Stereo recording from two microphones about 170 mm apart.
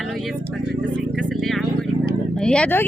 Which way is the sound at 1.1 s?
Centre (ahead or behind).